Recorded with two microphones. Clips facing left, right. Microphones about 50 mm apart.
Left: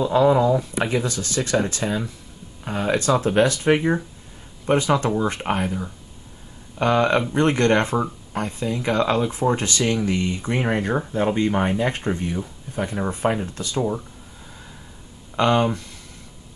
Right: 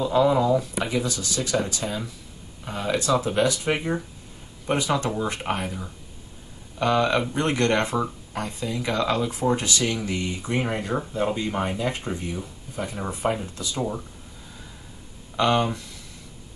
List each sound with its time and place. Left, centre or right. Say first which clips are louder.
0.0 s speech: left 2 dB; left
0.3 s speech: left 3 dB; centre
0.8 s speech: left 3 dB; left
3.7 s speech: left 6 dB; left
6.8 s speech: left 3 dB; left
13.7 s speech: left 5 dB; centre
15.3 s speech: left 3 dB; left